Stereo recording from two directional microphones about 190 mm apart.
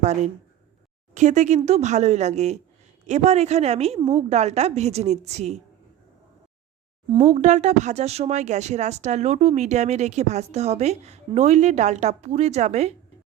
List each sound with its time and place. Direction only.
0.0 s speech: 35° right (ahead or behind)
7.3 s speech: 40° right (ahead or behind)